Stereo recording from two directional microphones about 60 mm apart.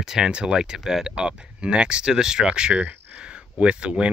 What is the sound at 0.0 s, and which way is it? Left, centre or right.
Speech, centre.